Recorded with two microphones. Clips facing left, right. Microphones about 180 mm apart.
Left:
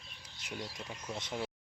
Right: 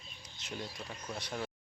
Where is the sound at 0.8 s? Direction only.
20° left (ahead or behind).